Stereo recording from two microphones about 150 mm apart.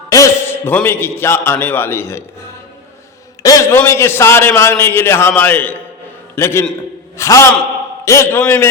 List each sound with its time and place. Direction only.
0.1 s a man's voice: 20° left (ahead or behind)